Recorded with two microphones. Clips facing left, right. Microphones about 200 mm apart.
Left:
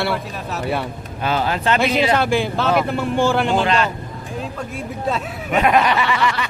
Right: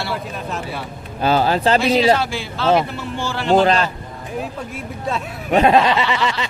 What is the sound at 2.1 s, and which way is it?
Speech, 55° left (ahead or behind).